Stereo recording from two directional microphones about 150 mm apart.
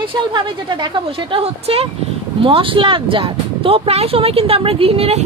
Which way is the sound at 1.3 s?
40° right (ahead or behind).